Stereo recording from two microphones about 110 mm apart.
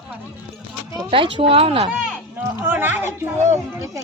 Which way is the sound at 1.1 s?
50° right (ahead or behind).